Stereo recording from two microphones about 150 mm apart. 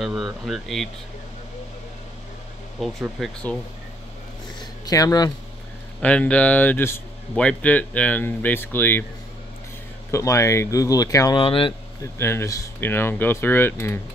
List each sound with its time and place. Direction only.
0.0 s speech: centre (ahead or behind)
2.8 s speech: centre (ahead or behind)
4.8 s speech: 25° left (ahead or behind)
5.9 s speech: 5° left (ahead or behind)
10.1 s speech: 20° left (ahead or behind)
11.3 s speech: 35° left (ahead or behind)
12.0 s speech: 15° left (ahead or behind)